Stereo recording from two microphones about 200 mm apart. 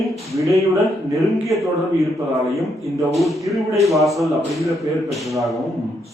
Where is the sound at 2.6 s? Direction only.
Centre (ahead or behind).